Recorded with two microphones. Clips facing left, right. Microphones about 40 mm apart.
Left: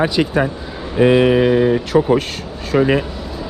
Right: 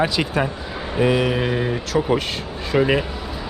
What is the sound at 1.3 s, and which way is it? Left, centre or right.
Speech, centre.